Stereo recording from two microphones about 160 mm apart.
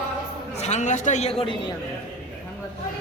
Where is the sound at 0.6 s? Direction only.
45° left (ahead or behind).